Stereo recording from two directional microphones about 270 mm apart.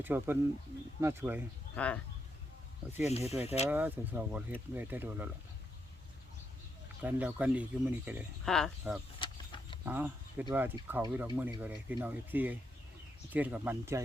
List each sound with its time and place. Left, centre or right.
0.0 s speech: centre
1.7 s speech: centre
3.1 s speech: left
3.7 s speech: centre
7.0 s speech: centre
9.1 s a sound: centre
9.8 s speech: centre